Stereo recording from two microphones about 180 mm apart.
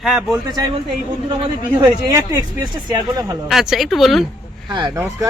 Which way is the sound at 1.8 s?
20° right (ahead or behind).